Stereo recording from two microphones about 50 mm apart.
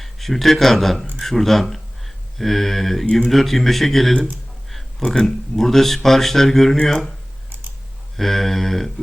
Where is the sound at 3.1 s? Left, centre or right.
Centre.